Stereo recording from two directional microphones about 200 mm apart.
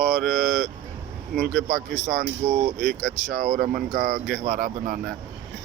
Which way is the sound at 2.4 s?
40° right (ahead or behind).